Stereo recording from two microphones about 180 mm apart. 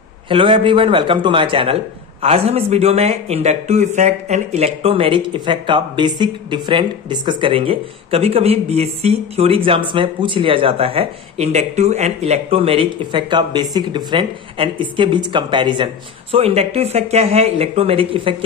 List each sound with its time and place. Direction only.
0.3 s a man's voice: 30° right (ahead or behind)